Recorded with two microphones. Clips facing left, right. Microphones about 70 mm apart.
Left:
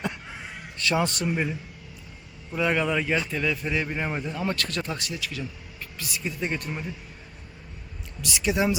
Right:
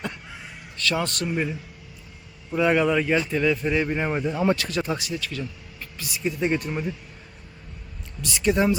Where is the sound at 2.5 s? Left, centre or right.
Centre.